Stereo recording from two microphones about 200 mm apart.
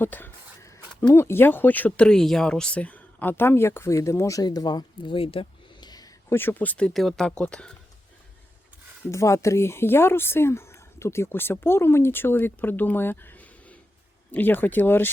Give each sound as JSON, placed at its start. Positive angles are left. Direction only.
{"t": 0.0, "sound": "speech", "side_deg": 10}
{"t": 9.0, "sound": "speech", "side_deg": 15}